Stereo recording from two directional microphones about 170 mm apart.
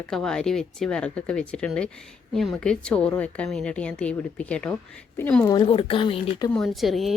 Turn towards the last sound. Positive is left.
turn(degrees=0)  # may be behind; listen again after turning